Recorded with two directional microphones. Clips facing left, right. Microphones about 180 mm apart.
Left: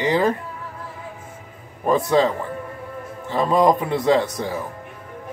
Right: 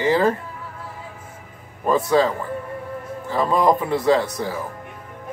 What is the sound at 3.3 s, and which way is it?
Speech, 20° left (ahead or behind).